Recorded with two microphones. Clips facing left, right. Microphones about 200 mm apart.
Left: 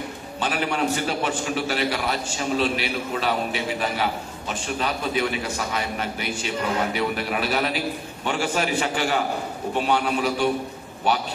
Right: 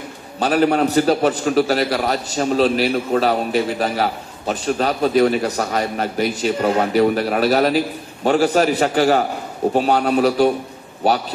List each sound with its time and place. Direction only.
0.4 s a man's voice: 40° right (ahead or behind)